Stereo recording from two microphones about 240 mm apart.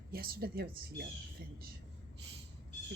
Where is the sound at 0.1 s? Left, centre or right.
Right.